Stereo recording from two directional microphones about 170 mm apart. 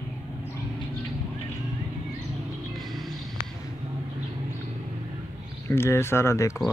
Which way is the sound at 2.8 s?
Centre (ahead or behind).